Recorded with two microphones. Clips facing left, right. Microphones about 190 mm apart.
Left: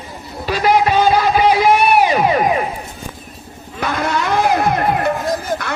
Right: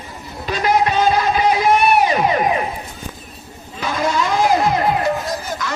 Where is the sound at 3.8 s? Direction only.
60° left (ahead or behind).